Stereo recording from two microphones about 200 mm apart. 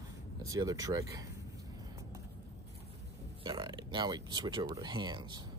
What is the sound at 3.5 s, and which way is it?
Speech, 20° right (ahead or behind).